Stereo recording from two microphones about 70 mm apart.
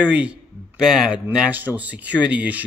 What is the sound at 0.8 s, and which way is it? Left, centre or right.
Speech, centre.